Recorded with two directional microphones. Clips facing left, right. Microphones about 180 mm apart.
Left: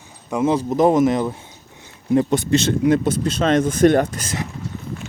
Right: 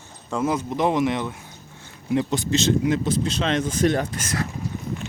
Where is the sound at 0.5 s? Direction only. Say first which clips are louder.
Left 8 dB; 40° left (ahead or behind).